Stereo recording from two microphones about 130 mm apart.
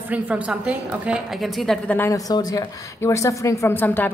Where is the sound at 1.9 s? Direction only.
20° left (ahead or behind).